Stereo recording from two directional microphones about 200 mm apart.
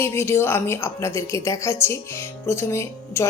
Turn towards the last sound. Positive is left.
turn(degrees=15)  # may be behind; listen again after turning